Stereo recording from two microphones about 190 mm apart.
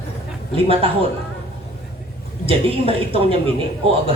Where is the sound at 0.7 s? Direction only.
30° right (ahead or behind).